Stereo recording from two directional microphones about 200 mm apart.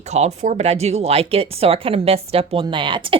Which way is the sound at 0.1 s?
35° right (ahead or behind).